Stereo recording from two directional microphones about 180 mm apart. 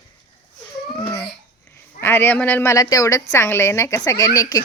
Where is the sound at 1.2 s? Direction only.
10° left (ahead or behind).